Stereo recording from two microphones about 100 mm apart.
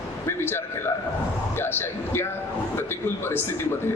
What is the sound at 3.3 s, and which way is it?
Speech, 25° left (ahead or behind).